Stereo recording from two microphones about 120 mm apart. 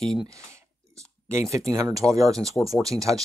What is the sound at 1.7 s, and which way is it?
Speech, 30° right (ahead or behind).